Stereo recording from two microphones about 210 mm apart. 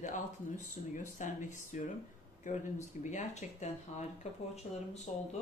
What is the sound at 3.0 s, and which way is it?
Speech, 35° left (ahead or behind).